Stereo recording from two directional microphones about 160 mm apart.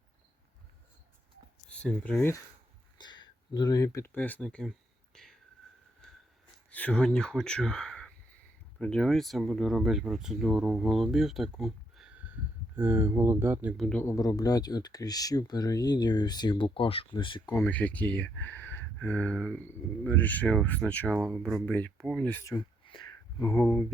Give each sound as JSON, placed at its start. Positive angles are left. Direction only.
{"t": 1.7, "sound": "speech", "side_deg": 5}
{"t": 3.0, "sound": "speech", "side_deg": 25}
{"t": 5.1, "sound": "whispering", "side_deg": 5}
{"t": 6.0, "sound": "a sound", "side_deg": 5}
{"t": 6.7, "sound": "speech", "side_deg": 10}
{"t": 13.7, "sound": "speech", "side_deg": 0}
{"t": 14.0, "sound": "speech", "side_deg": 20}
{"t": 17.5, "sound": "speech", "side_deg": 10}
{"t": 22.5, "sound": "a sound", "side_deg": 30}